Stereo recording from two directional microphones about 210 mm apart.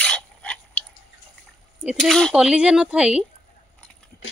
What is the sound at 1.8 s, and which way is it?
Speech, centre (ahead or behind).